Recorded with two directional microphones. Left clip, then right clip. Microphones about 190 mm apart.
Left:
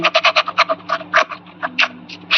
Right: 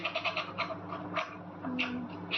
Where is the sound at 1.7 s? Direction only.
70° left (ahead or behind).